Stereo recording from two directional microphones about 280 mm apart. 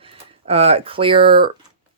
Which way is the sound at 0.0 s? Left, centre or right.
Right.